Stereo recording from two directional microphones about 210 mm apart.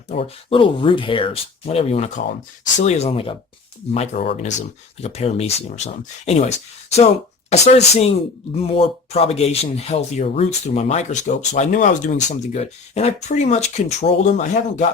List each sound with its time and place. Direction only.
0.1 s speech: 25° left (ahead or behind)
7.5 s speech: 30° left (ahead or behind)